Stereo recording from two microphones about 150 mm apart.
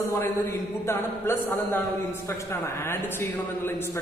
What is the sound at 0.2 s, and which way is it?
A man's voice, 15° left (ahead or behind).